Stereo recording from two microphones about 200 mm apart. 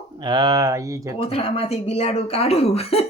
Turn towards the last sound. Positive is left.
turn(degrees=30)  # may be behind; listen again after turning